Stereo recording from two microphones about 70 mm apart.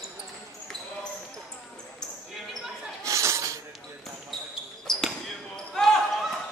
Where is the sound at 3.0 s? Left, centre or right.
Right.